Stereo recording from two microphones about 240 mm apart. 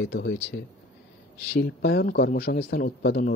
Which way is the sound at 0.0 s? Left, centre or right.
Left.